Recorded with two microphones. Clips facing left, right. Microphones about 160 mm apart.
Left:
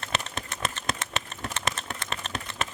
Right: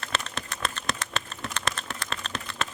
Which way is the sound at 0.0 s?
20° left (ahead or behind).